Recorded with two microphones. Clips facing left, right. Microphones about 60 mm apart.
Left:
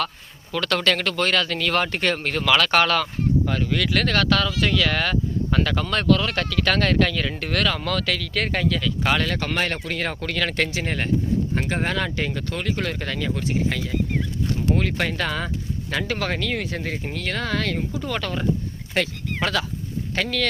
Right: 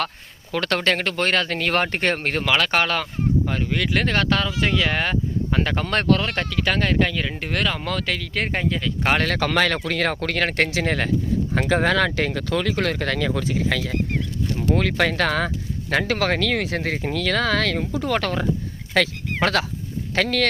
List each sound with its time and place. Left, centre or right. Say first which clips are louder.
0.5 s speech: even; right
2.4 s speech: left 3 dB; centre; by 6.2 s right
6.2 s speech: left 1 dB; right
9.0 s speech: right 2 dB; right
9.3 s speech: right 4 dB; right
10.8 s speech: right 4 dB; right
11.5 s speech: right 5 dB; right
18.0 s speech: right 4 dB; right